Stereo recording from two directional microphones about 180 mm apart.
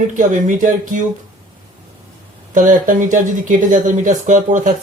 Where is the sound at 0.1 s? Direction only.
45° right (ahead or behind).